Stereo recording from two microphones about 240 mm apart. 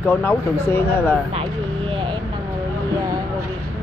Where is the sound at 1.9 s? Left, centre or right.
Right.